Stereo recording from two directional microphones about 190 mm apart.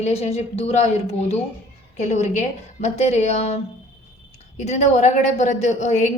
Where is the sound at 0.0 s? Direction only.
35° left (ahead or behind).